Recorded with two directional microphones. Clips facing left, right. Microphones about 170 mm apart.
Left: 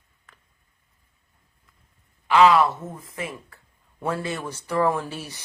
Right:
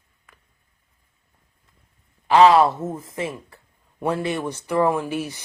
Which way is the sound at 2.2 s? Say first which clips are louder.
Right 3 dB; 35° right (ahead or behind).